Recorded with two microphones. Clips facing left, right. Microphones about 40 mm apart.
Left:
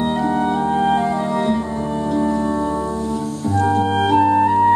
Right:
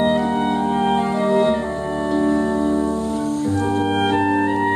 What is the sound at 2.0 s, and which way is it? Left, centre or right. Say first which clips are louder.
Organ: right 1 dB; right.